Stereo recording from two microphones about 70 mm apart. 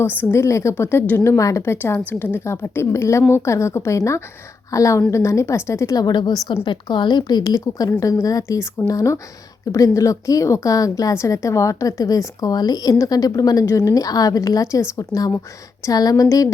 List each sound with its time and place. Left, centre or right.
0.0 s a woman's voice: left
1.4 s a woman's voice: left
1.7 s a woman's voice: left
6.1 s a woman's voice: left
13.7 s a woman's voice: left